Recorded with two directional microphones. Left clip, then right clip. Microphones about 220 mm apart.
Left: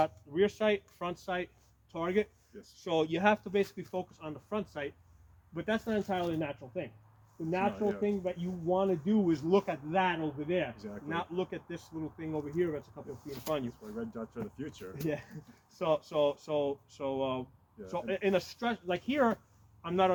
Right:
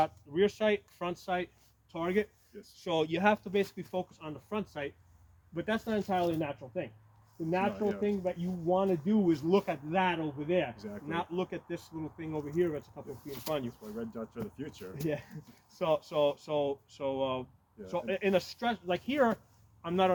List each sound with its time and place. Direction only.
0.0 s speech: 20° right (ahead or behind)